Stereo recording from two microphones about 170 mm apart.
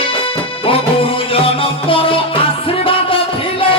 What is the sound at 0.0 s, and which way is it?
Music, 30° left (ahead or behind).